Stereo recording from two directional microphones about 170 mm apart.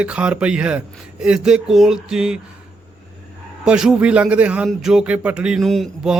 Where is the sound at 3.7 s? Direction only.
5° right (ahead or behind).